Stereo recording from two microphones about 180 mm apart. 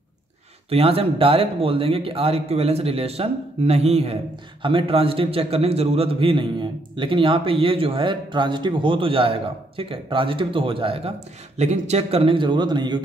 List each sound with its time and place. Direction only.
0.7 s speech: 30° right (ahead or behind)